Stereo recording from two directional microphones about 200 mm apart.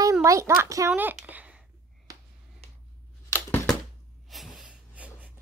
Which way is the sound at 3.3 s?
10° left (ahead or behind).